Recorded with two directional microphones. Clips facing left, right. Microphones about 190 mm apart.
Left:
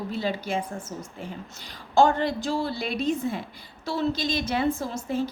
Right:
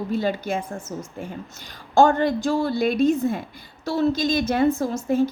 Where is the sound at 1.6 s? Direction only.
45° right (ahead or behind).